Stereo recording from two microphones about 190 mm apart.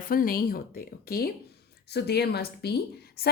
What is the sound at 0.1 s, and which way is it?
A woman's voice, 50° left (ahead or behind).